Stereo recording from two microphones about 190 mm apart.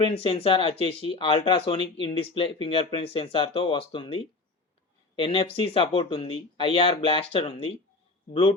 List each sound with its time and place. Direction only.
0.0 s speech: 30° left (ahead or behind)